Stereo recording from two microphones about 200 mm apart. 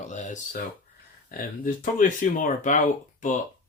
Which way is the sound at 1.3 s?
45° left (ahead or behind).